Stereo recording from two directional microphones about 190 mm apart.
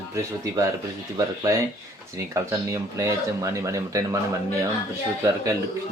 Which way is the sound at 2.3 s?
15° right (ahead or behind).